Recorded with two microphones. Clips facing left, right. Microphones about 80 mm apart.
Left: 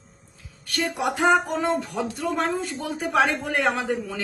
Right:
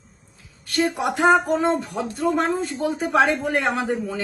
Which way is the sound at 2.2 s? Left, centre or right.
Centre.